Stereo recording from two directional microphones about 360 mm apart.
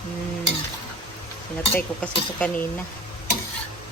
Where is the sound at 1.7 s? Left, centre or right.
Centre.